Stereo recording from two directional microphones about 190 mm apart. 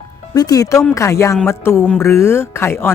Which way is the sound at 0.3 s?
20° left (ahead or behind).